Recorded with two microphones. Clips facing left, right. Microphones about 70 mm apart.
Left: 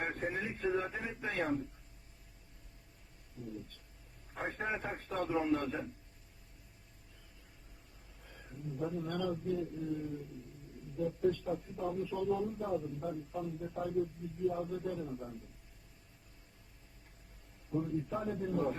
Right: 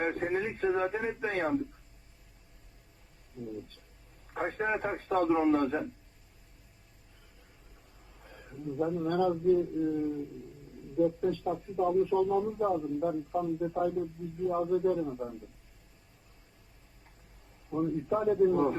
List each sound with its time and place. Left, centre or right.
0.0 s a man's voice: right
4.4 s a man's voice: right
8.2 s a sound: right
8.8 s a man's voice: right
17.7 s a man's voice: right